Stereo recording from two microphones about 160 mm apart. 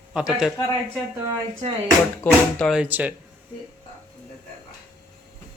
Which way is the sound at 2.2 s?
10° left (ahead or behind).